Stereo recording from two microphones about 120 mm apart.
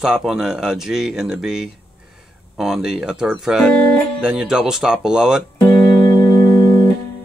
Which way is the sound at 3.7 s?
10° left (ahead or behind).